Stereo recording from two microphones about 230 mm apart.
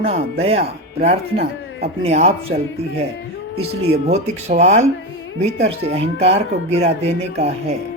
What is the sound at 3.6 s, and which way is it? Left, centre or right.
Speech, right.